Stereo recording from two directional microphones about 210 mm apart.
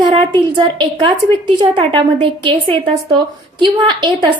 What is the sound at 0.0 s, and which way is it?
A woman's voice, 25° right (ahead or behind).